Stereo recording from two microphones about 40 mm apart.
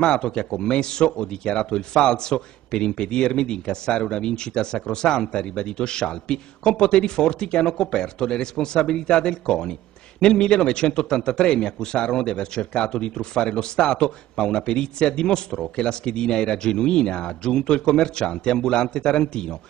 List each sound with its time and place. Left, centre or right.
0.0 s speech: left